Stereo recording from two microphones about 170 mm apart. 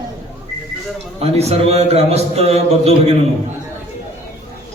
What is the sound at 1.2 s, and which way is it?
A man's voice, 40° right (ahead or behind).